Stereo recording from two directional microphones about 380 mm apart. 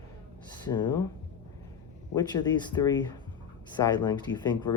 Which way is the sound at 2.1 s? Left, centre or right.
Centre.